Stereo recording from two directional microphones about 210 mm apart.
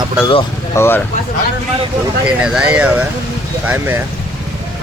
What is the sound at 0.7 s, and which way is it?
Speech, 10° left (ahead or behind).